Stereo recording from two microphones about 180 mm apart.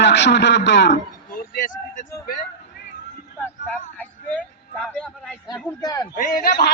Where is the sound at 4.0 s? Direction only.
5° left (ahead or behind).